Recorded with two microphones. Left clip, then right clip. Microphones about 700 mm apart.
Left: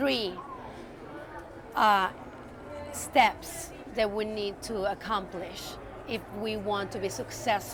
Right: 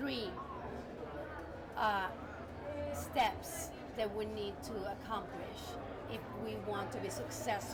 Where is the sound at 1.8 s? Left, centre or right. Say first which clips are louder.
Left 12 dB; left.